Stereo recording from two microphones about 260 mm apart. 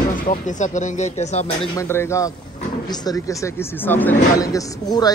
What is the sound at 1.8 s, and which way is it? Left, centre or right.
Speech, centre.